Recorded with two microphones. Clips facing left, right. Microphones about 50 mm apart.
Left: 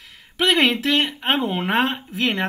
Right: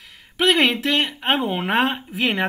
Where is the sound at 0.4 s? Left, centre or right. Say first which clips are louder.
Even; centre.